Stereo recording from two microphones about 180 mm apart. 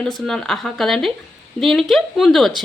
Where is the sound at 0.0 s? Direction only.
5° left (ahead or behind).